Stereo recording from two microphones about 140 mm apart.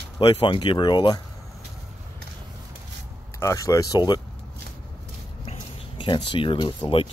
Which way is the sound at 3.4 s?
20° left (ahead or behind).